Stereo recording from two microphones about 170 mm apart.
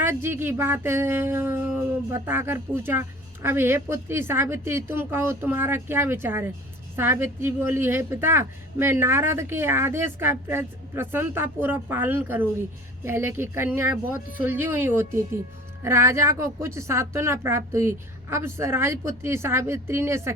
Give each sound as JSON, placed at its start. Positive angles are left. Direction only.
{"t": 0.0, "sound": "speech", "side_deg": -15}